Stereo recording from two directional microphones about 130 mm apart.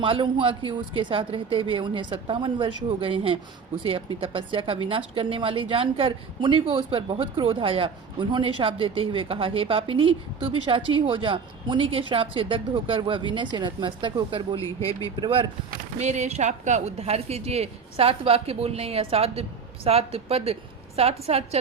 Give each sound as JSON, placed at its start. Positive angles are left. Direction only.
{"t": 0.0, "sound": "a man's voice", "side_deg": -40}
{"t": 15.7, "sound": "speech", "side_deg": -65}